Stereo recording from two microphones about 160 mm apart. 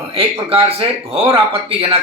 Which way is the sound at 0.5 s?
35° right (ahead or behind).